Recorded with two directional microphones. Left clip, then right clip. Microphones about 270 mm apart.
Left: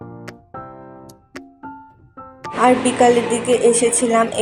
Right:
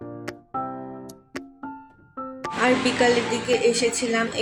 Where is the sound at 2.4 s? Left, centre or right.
Centre.